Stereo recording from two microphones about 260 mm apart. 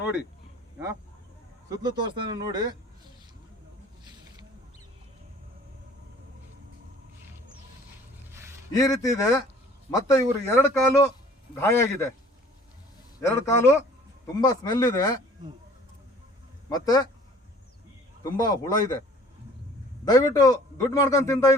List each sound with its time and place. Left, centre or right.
1.8 s speech: centre
8.3 s a sound: centre
8.7 s a man's voice: centre
13.1 s a man's voice: centre
16.6 s a man's voice: centre
18.2 s a man's voice: centre
20.1 s a man's voice: centre